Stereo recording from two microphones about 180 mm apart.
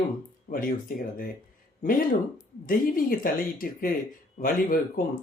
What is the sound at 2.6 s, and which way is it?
Speech, 50° left (ahead or behind).